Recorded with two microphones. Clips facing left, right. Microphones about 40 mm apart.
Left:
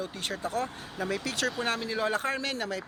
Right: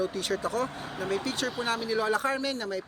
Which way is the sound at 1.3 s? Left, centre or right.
Left.